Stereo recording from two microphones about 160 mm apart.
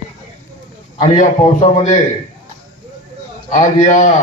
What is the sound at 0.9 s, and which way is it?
A man's voice, 50° left (ahead or behind).